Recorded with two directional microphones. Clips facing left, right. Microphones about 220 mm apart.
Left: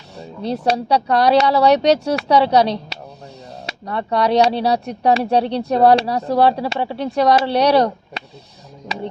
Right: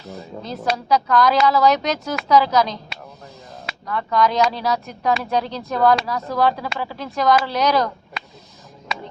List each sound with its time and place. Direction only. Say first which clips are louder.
0.1 s speech: left 7 dB; 30° left (ahead or behind)